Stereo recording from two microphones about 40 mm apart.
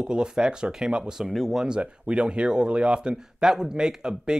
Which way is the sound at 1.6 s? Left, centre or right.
Right.